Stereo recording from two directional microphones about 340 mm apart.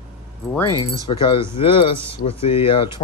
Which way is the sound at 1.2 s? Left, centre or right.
Centre.